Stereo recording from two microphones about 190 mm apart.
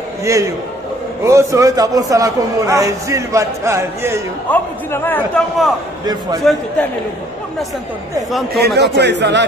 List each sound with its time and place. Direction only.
0.2 s a man's voice: 15° right (ahead or behind)
4.5 s a man's voice: 10° left (ahead or behind)
8.5 s speech: 60° right (ahead or behind)